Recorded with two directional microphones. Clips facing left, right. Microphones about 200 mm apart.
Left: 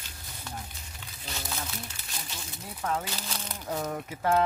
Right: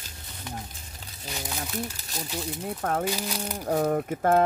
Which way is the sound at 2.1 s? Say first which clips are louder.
Right 10 dB; 45° right (ahead or behind).